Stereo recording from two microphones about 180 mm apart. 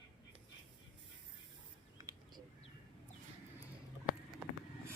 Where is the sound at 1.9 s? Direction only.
20° right (ahead or behind).